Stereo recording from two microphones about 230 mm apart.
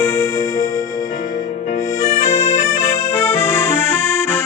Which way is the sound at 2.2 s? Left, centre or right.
Left.